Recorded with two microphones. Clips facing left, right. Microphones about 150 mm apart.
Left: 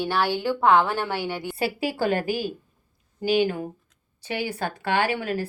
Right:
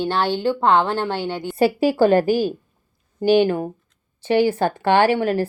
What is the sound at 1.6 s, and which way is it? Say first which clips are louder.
Speech: right 10 dB; 35° right (ahead or behind).